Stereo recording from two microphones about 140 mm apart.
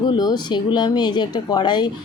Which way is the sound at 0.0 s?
30° left (ahead or behind).